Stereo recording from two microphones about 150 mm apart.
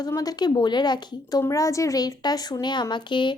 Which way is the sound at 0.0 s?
25° left (ahead or behind).